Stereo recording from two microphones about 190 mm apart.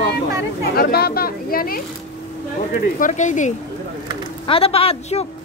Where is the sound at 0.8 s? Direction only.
55° left (ahead or behind).